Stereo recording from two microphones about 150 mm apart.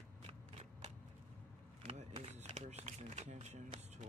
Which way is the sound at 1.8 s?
40° right (ahead or behind).